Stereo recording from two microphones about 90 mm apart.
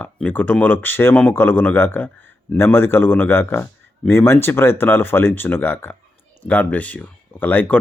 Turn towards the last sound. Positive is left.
turn(degrees=15)  # may be behind; listen again after turning